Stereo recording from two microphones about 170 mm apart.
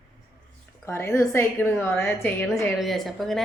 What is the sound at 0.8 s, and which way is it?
A woman's voice, 15° left (ahead or behind).